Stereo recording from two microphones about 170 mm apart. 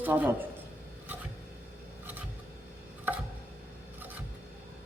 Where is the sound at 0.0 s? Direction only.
10° right (ahead or behind).